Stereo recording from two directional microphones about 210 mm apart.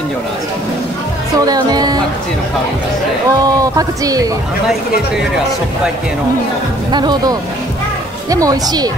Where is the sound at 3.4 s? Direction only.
15° right (ahead or behind).